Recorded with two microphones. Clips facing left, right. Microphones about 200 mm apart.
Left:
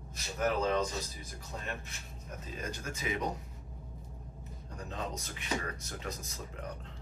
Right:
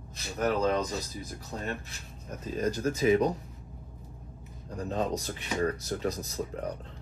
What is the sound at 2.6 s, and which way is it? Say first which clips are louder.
Speech: right 13 dB; 35° right (ahead or behind).